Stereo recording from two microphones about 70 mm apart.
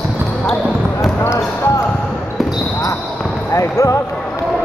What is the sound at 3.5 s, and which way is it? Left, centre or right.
Basketball bounce, left.